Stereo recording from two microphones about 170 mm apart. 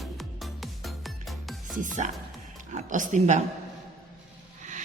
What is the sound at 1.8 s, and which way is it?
A woman's voice, 45° right (ahead or behind).